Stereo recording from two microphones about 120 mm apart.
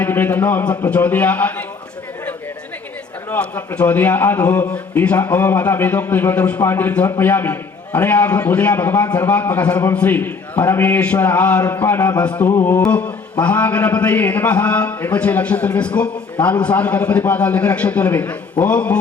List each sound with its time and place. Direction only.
0.0 s a man's voice: 15° left (ahead or behind)
3.2 s a man's voice: 15° left (ahead or behind)
12.5 s music: 20° left (ahead or behind)
13.4 s a man's voice: 10° left (ahead or behind)